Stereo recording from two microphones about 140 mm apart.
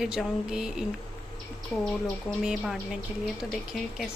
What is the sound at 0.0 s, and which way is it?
A woman's voice, 5° right (ahead or behind).